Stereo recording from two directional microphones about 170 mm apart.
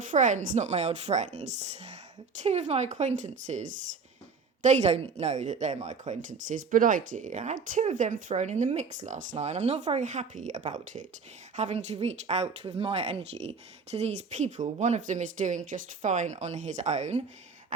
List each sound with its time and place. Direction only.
0.1 s speech: 50° right (ahead or behind)